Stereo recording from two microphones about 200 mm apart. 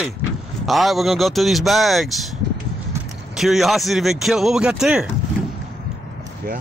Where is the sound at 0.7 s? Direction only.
Centre (ahead or behind).